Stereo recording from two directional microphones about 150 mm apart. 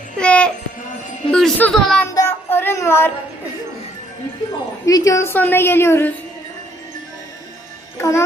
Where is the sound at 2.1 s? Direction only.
15° left (ahead or behind).